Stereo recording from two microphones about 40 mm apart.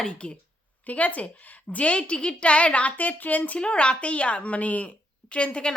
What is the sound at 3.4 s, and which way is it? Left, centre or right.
A woman's voice, left.